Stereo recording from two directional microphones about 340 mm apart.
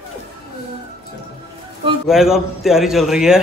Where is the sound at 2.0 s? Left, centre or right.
Centre.